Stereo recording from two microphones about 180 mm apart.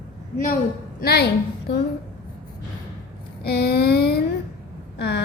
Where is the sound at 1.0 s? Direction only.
60° left (ahead or behind).